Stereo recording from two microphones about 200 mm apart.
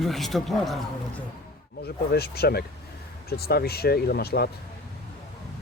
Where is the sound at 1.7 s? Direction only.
55° left (ahead or behind).